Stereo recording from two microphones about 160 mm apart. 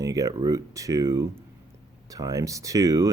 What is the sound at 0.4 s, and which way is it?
Speech, 20° right (ahead or behind).